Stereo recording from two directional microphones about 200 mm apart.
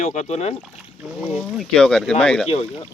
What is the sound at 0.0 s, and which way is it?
Speech, 35° left (ahead or behind).